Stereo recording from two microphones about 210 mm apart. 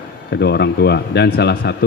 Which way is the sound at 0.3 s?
50° left (ahead or behind).